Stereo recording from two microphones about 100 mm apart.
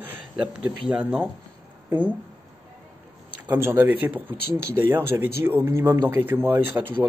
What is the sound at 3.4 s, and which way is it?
Speech, 20° right (ahead or behind).